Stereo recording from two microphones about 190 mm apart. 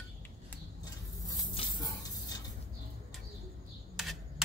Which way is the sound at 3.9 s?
Centre (ahead or behind).